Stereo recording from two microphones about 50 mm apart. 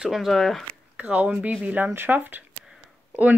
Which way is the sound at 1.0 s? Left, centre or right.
Right.